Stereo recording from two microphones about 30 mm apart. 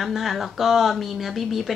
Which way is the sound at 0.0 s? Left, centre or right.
Centre.